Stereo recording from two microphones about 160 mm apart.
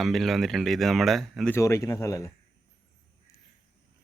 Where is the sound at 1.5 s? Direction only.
20° left (ahead or behind).